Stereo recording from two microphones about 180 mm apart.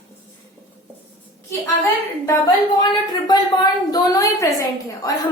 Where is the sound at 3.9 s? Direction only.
20° left (ahead or behind).